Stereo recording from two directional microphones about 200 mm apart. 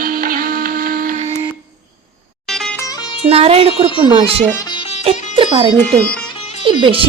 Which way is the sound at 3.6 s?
25° left (ahead or behind).